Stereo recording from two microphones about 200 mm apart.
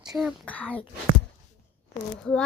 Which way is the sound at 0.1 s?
Centre (ahead or behind).